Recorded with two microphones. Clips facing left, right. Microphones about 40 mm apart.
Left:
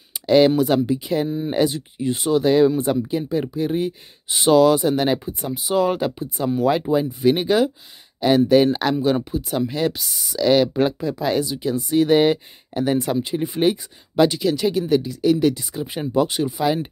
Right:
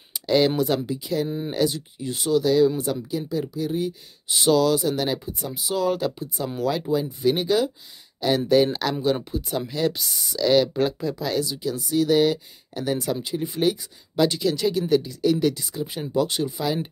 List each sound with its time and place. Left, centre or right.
0.1 s a sound: centre
0.6 s speech: centre; by 3.9 s left
4.3 s speech: left
7.1 s speech: centre
8.4 s speech: centre
9.7 s speech: centre
9.9 s speech: centre
10.4 s speech: centre; by 12.8 s left
12.8 s speech: left
14.3 s speech: centre
15.8 s speech: left
16.3 s speech: centre
16.6 s speech: left